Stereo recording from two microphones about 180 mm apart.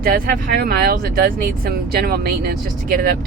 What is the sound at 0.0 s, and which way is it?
Speech, 55° right (ahead or behind).